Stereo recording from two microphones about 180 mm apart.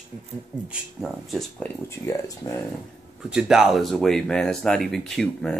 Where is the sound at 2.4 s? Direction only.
25° left (ahead or behind).